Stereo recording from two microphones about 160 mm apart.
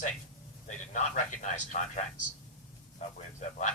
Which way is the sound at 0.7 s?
50° left (ahead or behind).